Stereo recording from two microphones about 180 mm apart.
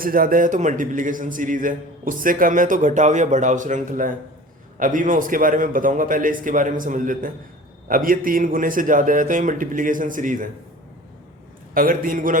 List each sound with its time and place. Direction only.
0.0 s a man's voice: 50° right (ahead or behind)
11.7 s a man's voice: 50° right (ahead or behind)